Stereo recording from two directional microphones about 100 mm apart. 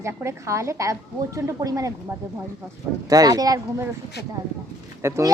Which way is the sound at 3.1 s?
40° right (ahead or behind).